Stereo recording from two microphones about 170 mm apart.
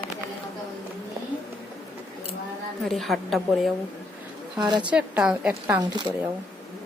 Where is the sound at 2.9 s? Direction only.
Centre (ahead or behind).